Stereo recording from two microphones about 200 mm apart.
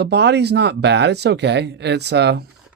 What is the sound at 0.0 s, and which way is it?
Speech, 55° right (ahead or behind).